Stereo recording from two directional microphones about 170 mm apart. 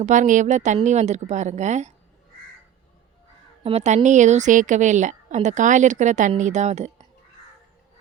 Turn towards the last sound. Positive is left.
turn(degrees=-40)  # may be behind; listen again after turning